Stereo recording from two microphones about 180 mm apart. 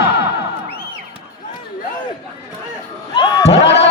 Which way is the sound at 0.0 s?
60° left (ahead or behind).